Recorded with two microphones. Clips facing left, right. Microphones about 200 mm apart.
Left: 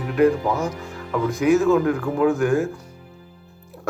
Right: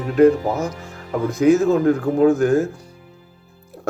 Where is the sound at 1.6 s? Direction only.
40° right (ahead or behind).